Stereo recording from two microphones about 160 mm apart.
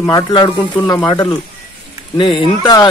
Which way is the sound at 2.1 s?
30° left (ahead or behind).